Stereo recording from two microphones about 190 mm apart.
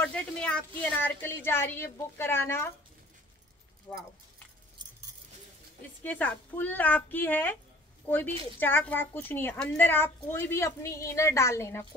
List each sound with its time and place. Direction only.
0.0 s a woman's voice: 5° left (ahead or behind)
3.9 s speech: 20° left (ahead or behind)
6.0 s a woman's voice: 10° left (ahead or behind)
8.5 s a woman's voice: 10° left (ahead or behind)